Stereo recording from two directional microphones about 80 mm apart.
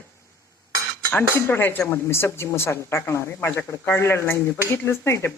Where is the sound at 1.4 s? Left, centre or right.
Left.